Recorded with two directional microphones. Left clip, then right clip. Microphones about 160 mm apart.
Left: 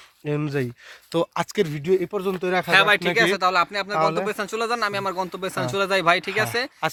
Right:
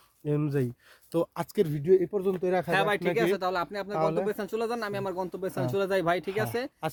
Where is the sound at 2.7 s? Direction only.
20° right (ahead or behind).